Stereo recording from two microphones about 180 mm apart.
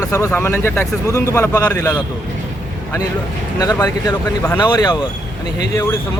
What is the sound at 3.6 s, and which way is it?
Speech, 20° left (ahead or behind).